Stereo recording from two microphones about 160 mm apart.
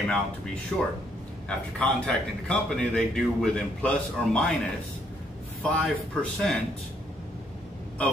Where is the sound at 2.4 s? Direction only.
5° left (ahead or behind).